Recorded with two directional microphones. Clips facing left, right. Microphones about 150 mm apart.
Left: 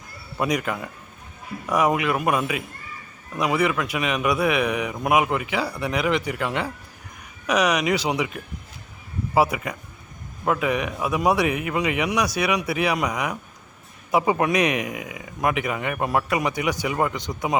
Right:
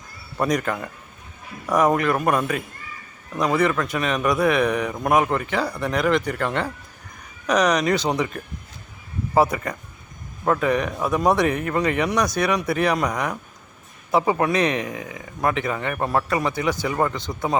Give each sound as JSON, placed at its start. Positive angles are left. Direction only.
{"t": 0.3, "sound": "speech", "side_deg": 10}
{"t": 9.3, "sound": "speech", "side_deg": 10}